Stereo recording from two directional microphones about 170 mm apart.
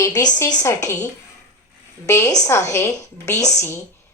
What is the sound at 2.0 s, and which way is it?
A woman's voice, 20° left (ahead or behind).